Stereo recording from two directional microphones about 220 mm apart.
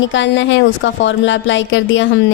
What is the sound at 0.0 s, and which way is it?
A woman's voice, 55° left (ahead or behind).